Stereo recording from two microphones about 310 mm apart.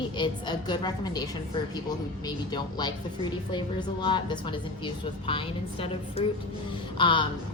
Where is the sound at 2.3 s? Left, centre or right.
Centre.